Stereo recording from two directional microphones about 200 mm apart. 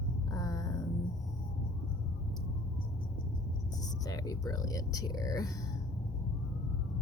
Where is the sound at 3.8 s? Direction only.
20° left (ahead or behind).